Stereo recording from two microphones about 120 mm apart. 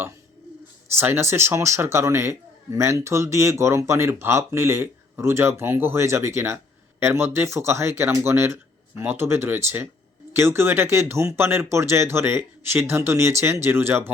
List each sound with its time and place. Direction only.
0.9 s a man's voice: 20° right (ahead or behind)